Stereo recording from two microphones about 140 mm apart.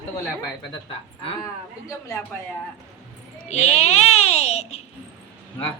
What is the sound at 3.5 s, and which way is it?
A child's voice, 55° left (ahead or behind).